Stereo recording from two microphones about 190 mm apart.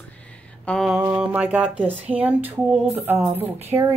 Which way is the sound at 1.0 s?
10° right (ahead or behind).